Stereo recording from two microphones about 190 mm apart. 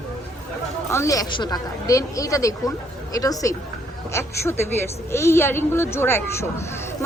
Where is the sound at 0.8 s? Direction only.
15° left (ahead or behind).